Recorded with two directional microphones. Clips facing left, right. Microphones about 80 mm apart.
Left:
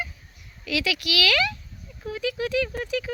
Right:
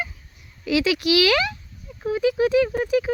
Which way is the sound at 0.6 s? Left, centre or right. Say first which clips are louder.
Right 7 dB; right.